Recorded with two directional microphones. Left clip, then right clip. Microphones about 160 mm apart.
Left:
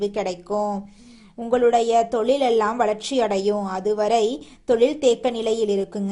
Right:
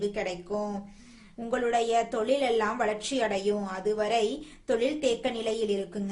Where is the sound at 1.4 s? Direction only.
30° left (ahead or behind).